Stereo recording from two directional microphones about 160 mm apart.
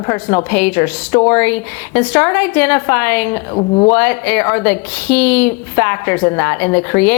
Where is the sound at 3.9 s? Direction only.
10° left (ahead or behind).